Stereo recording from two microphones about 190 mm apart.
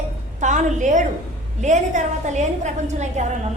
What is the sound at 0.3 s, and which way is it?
A woman's voice, 40° right (ahead or behind).